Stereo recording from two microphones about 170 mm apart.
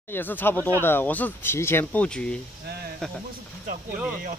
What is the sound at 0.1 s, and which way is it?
Speech, 10° left (ahead or behind).